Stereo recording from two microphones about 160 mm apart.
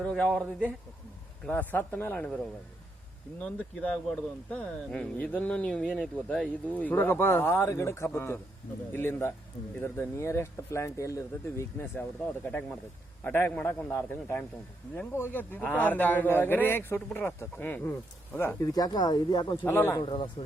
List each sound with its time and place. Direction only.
0.0 s a man's voice: 5° left (ahead or behind)
1.5 s a man's voice: 10° left (ahead or behind)
3.4 s a man's voice: 5° left (ahead or behind)
13.2 s a man's voice: 10° left (ahead or behind); by 19.5 s 25° left (ahead or behind)
19.6 s a man's voice: 15° left (ahead or behind)
20.0 s speech: 30° left (ahead or behind)